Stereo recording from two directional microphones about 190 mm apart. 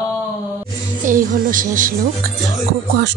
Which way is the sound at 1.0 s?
45° right (ahead or behind).